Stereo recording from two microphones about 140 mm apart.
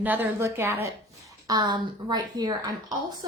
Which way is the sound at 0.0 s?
15° right (ahead or behind).